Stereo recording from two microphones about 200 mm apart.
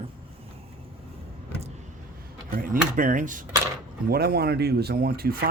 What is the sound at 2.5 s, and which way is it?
Speech, 45° right (ahead or behind).